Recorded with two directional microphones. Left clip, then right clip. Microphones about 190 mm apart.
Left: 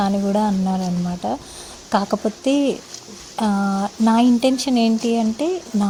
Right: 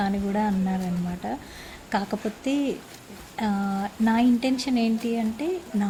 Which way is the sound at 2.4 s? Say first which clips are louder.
Left 7 dB; 30° left (ahead or behind).